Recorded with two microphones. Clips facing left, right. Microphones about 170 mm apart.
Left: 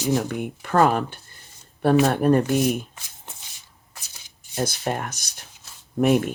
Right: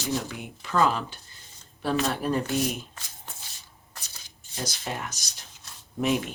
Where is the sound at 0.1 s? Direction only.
55° left (ahead or behind).